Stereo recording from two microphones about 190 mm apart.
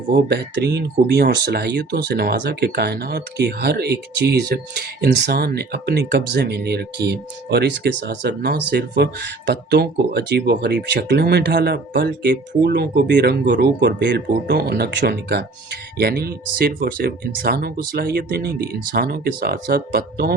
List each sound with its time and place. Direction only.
0.3 s speech: 60° right (ahead or behind)